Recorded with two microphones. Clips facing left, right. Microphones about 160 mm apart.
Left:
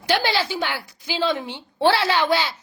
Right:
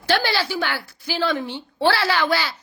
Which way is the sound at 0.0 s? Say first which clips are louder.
Even; 20° left (ahead or behind).